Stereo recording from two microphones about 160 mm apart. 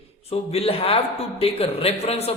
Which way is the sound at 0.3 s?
40° left (ahead or behind).